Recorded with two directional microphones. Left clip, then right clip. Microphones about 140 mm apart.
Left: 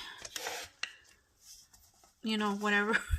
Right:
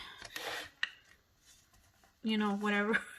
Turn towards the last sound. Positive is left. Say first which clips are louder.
# left 3 dB
turn(degrees=30)  # may be behind; listen again after turning